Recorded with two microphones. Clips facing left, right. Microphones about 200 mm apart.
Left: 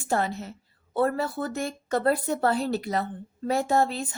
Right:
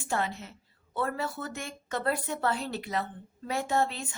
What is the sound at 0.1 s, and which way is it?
Speech, 40° left (ahead or behind).